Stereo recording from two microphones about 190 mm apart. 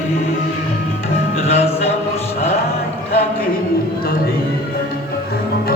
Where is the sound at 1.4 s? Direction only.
35° left (ahead or behind).